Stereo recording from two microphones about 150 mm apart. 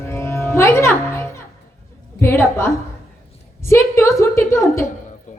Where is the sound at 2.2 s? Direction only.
15° left (ahead or behind).